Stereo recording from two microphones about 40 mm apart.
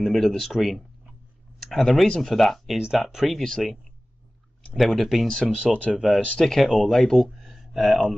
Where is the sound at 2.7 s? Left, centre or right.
Centre.